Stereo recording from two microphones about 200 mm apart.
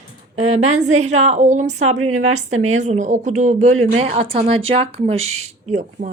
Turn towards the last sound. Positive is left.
turn(degrees=-40)  # may be behind; listen again after turning